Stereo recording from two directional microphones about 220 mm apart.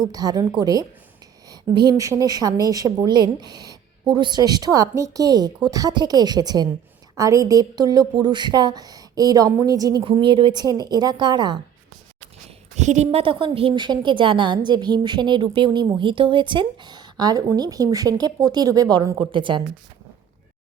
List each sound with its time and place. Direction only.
0.0 s a woman's voice: 15° right (ahead or behind)
12.7 s a woman's voice: 30° right (ahead or behind)